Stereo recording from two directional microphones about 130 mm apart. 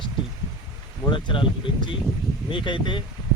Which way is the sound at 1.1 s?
40° left (ahead or behind).